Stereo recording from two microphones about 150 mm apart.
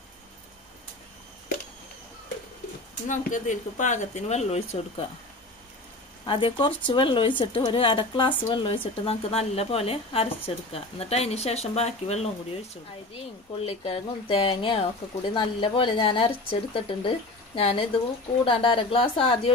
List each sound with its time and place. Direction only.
3.1 s speech: 55° left (ahead or behind)
6.2 s a woman's voice: 35° left (ahead or behind)
13.7 s a woman's voice: 40° left (ahead or behind)